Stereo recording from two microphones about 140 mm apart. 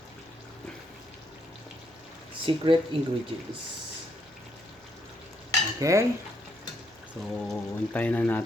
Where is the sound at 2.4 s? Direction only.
40° right (ahead or behind).